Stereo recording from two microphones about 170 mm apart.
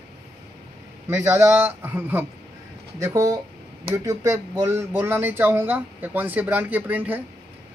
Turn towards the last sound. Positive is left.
turn(degrees=-10)  # may be behind; listen again after turning